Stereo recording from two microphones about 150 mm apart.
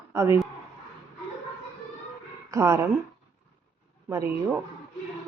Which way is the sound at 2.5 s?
20° right (ahead or behind).